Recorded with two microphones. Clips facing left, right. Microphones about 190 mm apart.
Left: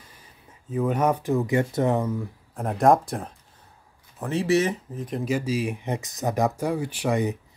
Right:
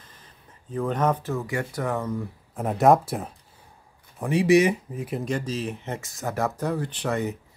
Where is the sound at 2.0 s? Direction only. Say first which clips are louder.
Left 1 dB; centre (ahead or behind).